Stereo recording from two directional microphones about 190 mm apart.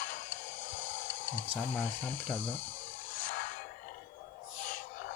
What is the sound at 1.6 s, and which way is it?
Speech, 10° left (ahead or behind).